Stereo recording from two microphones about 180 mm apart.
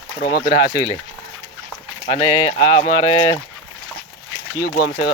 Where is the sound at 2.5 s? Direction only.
40° left (ahead or behind).